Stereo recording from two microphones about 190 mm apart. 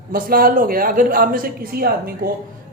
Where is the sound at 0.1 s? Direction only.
50° right (ahead or behind).